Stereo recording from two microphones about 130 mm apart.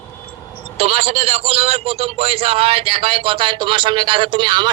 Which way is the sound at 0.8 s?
50° right (ahead or behind).